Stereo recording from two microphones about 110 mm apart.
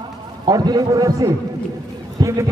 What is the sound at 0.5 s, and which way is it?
A man's voice, 35° right (ahead or behind).